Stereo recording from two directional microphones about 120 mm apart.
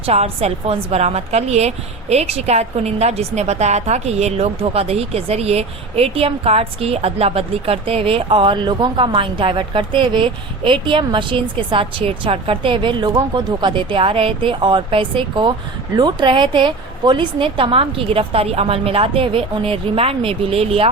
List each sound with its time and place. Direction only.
0.0 s a woman's voice: 55° right (ahead or behind)